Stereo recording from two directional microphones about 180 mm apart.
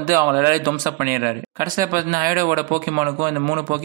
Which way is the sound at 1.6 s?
50° right (ahead or behind).